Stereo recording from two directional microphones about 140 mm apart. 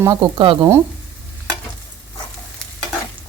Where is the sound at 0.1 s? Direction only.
35° right (ahead or behind).